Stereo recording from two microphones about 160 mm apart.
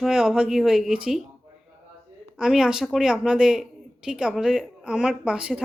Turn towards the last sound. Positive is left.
turn(degrees=-5)  # may be behind; listen again after turning